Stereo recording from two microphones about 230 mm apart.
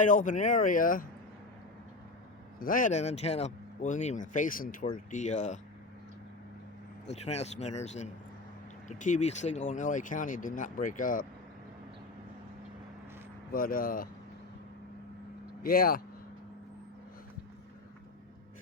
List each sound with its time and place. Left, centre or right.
0.0 s speech: left
2.6 s speech: left
7.1 s speech: left
13.5 s speech: left
15.6 s speech: left